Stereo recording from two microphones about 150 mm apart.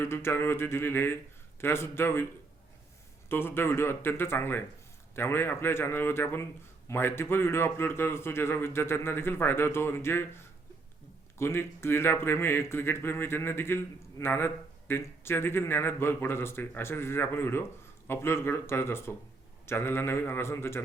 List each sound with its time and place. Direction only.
0.0 s a man's voice: 15° left (ahead or behind)
3.2 s a man's voice: 15° left (ahead or behind)